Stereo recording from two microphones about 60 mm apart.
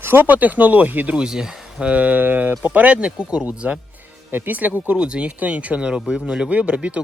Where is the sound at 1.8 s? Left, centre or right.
Right.